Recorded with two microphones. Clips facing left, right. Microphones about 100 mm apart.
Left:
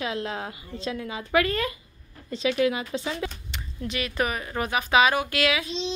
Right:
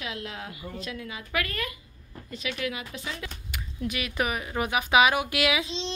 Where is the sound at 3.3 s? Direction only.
5° right (ahead or behind).